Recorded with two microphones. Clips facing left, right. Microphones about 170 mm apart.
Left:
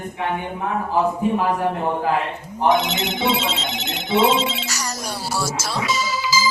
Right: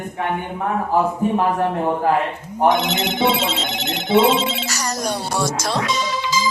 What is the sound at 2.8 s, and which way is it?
Ringtone, 55° right (ahead or behind).